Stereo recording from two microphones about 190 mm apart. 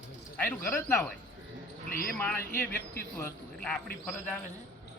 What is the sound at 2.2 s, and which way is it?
Speech, 10° left (ahead or behind).